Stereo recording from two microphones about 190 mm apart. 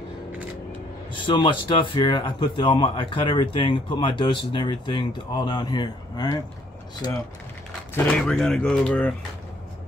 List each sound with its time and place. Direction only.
1.1 s speech: 25° left (ahead or behind)
7.9 s speech: 5° left (ahead or behind)